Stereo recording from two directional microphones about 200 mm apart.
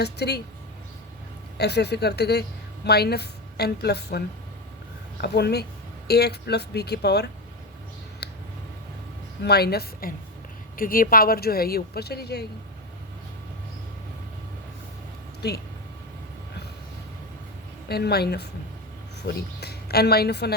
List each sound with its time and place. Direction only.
0.0 s speech: 55° left (ahead or behind)
1.5 s speech: 55° left (ahead or behind)
5.2 s speech: 55° left (ahead or behind)
9.4 s speech: 55° left (ahead or behind)
15.4 s speech: 55° left (ahead or behind)
17.8 s speech: 55° left (ahead or behind)